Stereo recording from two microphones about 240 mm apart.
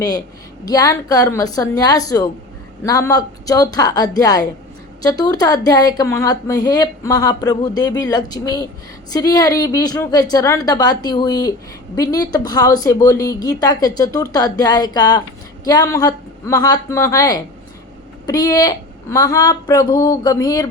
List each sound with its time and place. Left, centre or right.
0.7 s speech: centre